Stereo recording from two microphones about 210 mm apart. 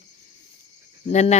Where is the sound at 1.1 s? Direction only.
30° left (ahead or behind).